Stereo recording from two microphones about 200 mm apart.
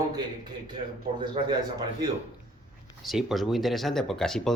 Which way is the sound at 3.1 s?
Centre (ahead or behind).